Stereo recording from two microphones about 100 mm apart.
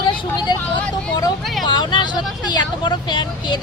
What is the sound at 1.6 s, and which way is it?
Vehicle, 50° left (ahead or behind).